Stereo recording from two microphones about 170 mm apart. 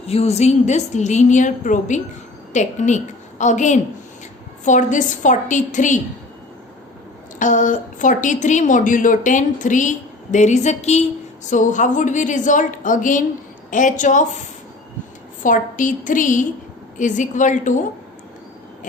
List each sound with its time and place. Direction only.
0.0 s a woman's voice: 35° left (ahead or behind)
7.3 s a woman's voice: 50° left (ahead or behind)
15.4 s a woman's voice: 50° left (ahead or behind)